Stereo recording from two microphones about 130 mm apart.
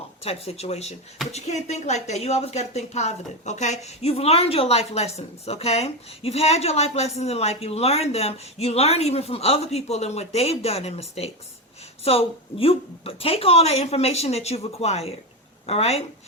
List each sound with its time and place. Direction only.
0.2 s speech: 50° left (ahead or behind)